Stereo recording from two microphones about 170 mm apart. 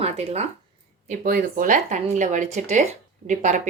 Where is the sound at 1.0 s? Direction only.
55° right (ahead or behind).